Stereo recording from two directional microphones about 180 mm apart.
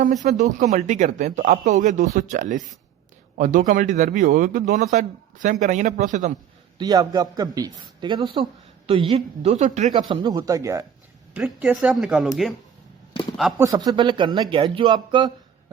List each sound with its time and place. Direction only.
0.0 s a man's voice: 45° right (ahead or behind)
6.7 s a man's voice: 20° right (ahead or behind); by 9.9 s 40° right (ahead or behind)
9.9 s a man's voice: 25° right (ahead or behind)
11.3 s speech: 5° right (ahead or behind)
13.6 s a man's voice: 20° right (ahead or behind)